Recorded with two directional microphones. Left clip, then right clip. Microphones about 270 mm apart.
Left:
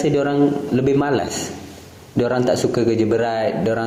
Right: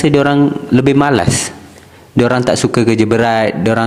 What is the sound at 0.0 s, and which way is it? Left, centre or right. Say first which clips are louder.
Speech: right 6 dB; right.